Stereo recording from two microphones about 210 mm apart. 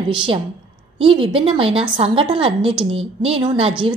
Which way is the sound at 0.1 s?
25° right (ahead or behind).